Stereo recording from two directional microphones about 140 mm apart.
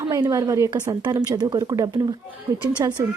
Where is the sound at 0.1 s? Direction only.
25° right (ahead or behind).